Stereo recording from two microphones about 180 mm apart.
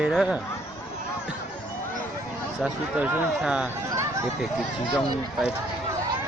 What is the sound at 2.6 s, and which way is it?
Speech, 10° right (ahead or behind).